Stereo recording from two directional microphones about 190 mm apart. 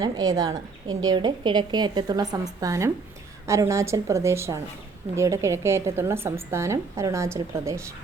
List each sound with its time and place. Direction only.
0.0 s a woman's voice: 20° right (ahead or behind)